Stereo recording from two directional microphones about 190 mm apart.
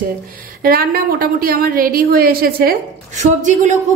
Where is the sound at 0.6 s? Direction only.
50° right (ahead or behind).